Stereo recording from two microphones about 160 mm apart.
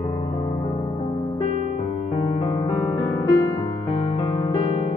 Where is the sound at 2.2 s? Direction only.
35° left (ahead or behind).